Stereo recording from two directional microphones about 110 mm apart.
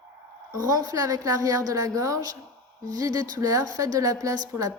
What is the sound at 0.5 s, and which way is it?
A woman's voice, 35° right (ahead or behind).